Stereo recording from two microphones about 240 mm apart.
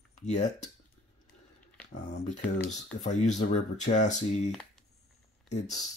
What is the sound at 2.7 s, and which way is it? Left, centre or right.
Speech, left.